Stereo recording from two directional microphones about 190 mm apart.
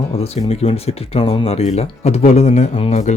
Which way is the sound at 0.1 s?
30° left (ahead or behind).